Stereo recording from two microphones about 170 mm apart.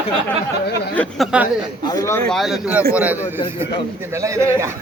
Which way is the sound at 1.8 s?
20° left (ahead or behind).